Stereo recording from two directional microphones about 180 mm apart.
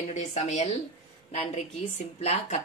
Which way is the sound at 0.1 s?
40° left (ahead or behind).